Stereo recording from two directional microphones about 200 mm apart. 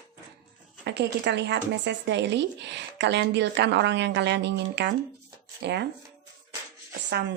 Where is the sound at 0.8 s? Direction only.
55° right (ahead or behind).